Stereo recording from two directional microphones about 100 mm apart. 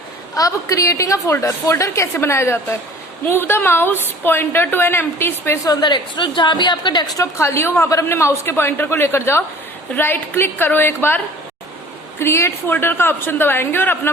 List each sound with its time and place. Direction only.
0.3 s a woman's voice: 35° left (ahead or behind)
5.6 s a woman's voice: 45° left (ahead or behind)
7.2 s a woman's voice: 25° left (ahead or behind)
12.2 s a woman's voice: 25° left (ahead or behind)